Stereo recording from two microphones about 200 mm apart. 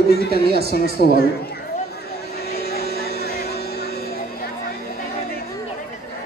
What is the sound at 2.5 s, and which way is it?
Vehicle, 50° left (ahead or behind).